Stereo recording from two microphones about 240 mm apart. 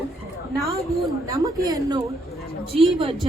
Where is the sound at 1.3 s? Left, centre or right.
Centre.